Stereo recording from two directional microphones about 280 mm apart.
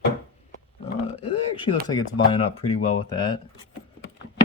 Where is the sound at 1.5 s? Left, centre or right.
Centre.